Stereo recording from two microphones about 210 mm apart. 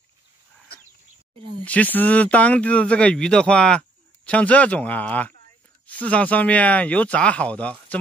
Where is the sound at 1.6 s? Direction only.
5° left (ahead or behind).